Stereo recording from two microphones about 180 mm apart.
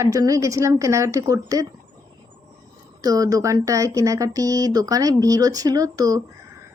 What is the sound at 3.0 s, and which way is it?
Speech, 20° right (ahead or behind).